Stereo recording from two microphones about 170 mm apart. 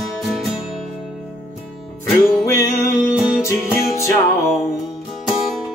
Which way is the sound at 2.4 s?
20° left (ahead or behind).